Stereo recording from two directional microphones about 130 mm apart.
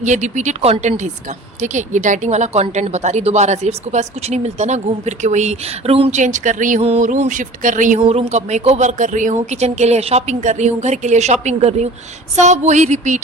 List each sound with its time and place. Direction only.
0.0 s a woman's voice: 65° right (ahead or behind)
7.9 s a woman's voice: 45° right (ahead or behind); by 13.1 s 65° right (ahead or behind)